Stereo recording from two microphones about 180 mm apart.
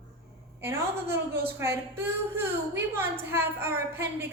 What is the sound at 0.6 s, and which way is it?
A woman's voice, 15° right (ahead or behind).